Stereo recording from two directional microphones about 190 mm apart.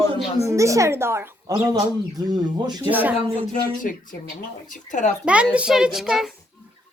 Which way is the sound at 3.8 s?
45° left (ahead or behind).